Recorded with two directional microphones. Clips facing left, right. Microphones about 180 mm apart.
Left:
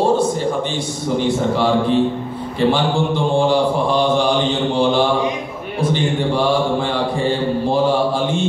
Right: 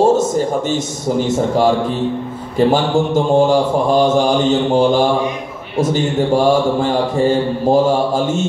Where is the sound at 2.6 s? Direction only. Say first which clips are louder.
Right 3 dB; 45° right (ahead or behind).